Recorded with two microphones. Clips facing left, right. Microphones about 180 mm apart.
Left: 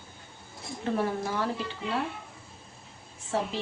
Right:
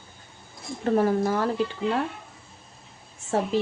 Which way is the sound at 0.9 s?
45° right (ahead or behind).